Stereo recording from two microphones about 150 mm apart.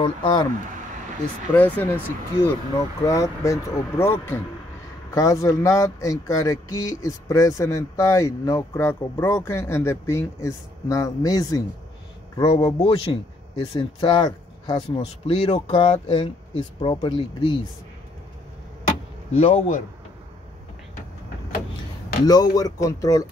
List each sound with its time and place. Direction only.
0.0 s speech: 30° left (ahead or behind)
1.5 s speech: 10° left (ahead or behind)
12.4 s speech: 35° left (ahead or behind)
19.3 s a man's voice: 50° left (ahead or behind)
22.2 s speech: 25° left (ahead or behind)